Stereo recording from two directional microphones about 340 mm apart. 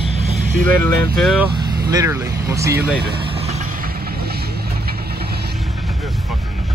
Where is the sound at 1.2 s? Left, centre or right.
Centre.